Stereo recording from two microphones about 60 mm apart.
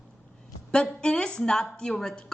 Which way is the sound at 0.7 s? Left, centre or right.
Centre.